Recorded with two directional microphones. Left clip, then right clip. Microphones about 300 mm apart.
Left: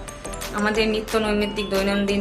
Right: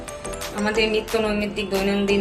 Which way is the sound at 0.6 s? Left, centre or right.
Centre.